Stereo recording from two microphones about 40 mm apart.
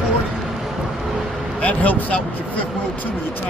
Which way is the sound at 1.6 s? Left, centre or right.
Left.